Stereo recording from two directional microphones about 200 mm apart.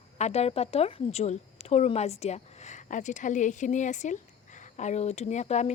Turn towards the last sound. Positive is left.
turn(degrees=35)  # may be behind; listen again after turning